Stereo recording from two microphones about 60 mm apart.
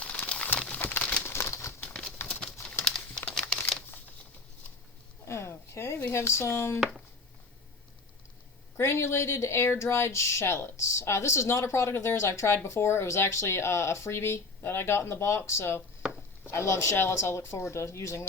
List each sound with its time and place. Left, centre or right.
0.0 s pigeon: left
0.7 s a sound: left
1.2 s crumpling: left
1.9 s bird: centre
3.5 s crumpling: centre
5.2 s a sound: left
8.8 s speech: left